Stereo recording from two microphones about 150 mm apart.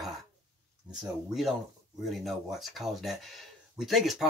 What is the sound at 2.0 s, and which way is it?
Speech, centre (ahead or behind).